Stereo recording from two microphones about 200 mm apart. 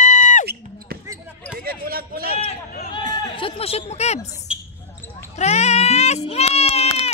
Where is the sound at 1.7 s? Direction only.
45° right (ahead or behind).